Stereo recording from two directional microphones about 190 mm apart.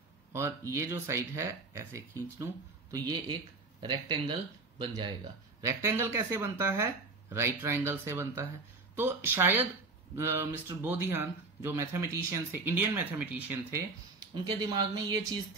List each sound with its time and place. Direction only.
0.3 s speech: 15° right (ahead or behind)
14.3 s speech: 20° right (ahead or behind)